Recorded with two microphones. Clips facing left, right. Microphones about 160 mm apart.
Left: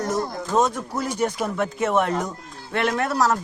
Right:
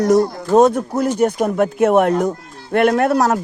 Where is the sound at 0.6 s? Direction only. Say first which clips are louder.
Right 9 dB; 60° right (ahead or behind).